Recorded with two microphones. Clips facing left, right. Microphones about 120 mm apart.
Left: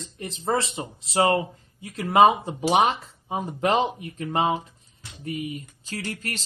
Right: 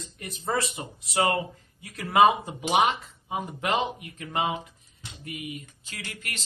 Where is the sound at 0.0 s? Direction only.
25° left (ahead or behind).